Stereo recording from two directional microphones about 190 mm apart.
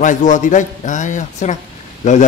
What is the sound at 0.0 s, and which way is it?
Speech, 40° left (ahead or behind).